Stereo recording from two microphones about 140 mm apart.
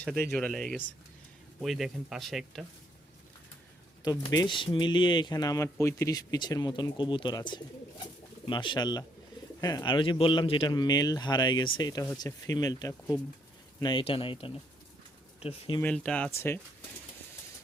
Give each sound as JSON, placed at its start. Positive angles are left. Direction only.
{"t": 0.0, "sound": "speech", "side_deg": 5}
{"t": 4.3, "sound": "speech", "side_deg": 30}
{"t": 14.0, "sound": "speech", "side_deg": 40}
{"t": 15.8, "sound": "speech", "side_deg": 10}